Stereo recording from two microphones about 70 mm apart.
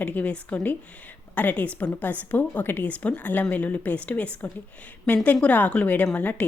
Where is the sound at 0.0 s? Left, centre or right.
Left.